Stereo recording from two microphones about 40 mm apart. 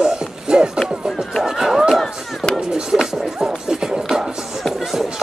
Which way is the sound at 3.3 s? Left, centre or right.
Centre.